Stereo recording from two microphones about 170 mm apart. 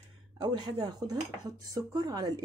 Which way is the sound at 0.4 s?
25° right (ahead or behind).